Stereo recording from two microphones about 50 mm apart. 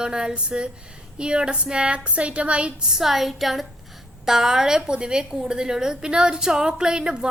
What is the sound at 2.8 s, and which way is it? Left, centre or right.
A woman's voice, centre.